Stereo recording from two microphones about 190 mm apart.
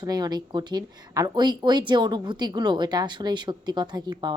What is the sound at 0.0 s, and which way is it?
Speech, 20° right (ahead or behind).